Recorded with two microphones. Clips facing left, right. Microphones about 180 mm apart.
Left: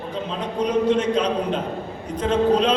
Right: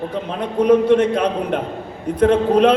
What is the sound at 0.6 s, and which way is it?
A man's voice, 55° right (ahead or behind).